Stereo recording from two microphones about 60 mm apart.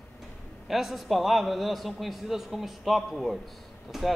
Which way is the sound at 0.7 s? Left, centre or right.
Centre.